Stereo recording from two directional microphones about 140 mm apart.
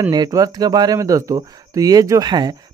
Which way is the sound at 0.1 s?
25° right (ahead or behind).